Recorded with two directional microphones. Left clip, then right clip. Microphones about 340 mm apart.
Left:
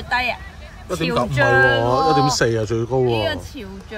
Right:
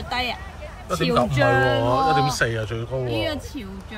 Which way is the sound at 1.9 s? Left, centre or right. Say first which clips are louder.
Left 3 dB; centre.